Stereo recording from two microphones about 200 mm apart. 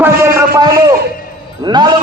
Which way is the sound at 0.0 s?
15° right (ahead or behind).